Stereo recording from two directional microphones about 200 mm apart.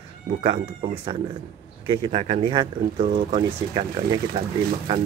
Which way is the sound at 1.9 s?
30° right (ahead or behind).